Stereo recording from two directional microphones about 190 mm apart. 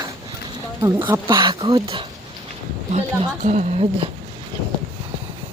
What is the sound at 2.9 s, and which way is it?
A woman's voice, 35° right (ahead or behind).